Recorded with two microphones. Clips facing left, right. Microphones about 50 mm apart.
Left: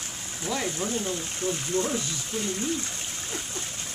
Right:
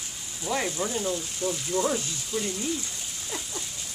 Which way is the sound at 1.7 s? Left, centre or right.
Right.